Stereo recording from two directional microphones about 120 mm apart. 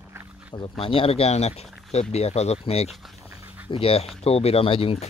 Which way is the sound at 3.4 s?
15° right (ahead or behind).